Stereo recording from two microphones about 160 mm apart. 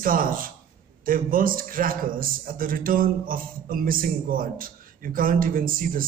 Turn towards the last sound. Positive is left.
turn(degrees=-60)  # may be behind; listen again after turning